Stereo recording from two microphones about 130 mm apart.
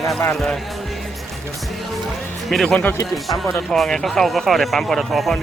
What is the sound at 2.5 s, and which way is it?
Speech, 5° left (ahead or behind).